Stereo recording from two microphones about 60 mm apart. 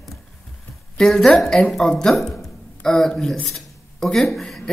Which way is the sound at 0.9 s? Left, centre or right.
Centre.